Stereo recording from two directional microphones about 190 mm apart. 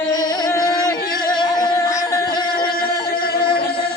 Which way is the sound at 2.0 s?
25° left (ahead or behind).